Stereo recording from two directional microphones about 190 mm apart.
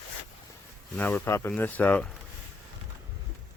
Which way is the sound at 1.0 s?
10° left (ahead or behind).